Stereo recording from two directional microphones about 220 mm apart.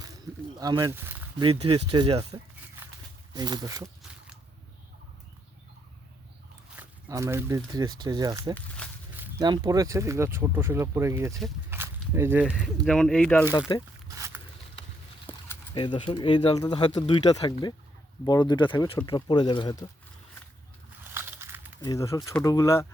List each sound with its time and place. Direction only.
0.6 s speech: 15° right (ahead or behind)
1.5 s speech: 25° right (ahead or behind)
3.3 s speech: 20° right (ahead or behind)
6.7 s speech: 10° right (ahead or behind)
8.5 s speech: 5° left (ahead or behind)
9.2 s speech: 20° right (ahead or behind)
11.7 s walk: 10° right (ahead or behind)
12.8 s speech: 5° left (ahead or behind)
13.7 s speech: 20° left (ahead or behind)
15.3 s a sound: 10° left (ahead or behind)
15.7 s speech: 20° left (ahead or behind)
21.0 s a sound: 10° right (ahead or behind)
21.8 s speech: 15° left (ahead or behind)